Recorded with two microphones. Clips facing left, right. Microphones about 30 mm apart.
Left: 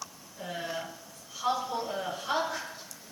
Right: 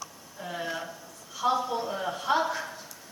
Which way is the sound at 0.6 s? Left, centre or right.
Centre.